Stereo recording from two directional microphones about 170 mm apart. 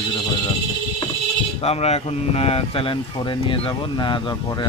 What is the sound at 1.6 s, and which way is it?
Speech, 35° left (ahead or behind).